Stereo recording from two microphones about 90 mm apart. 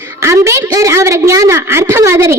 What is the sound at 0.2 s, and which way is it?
A woman's voice, 30° right (ahead or behind).